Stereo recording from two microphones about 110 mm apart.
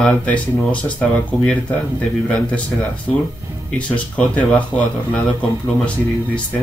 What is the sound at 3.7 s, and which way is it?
Speech, 10° left (ahead or behind).